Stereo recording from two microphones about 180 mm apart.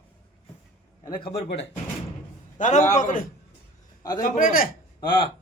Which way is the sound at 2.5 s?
45° left (ahead or behind).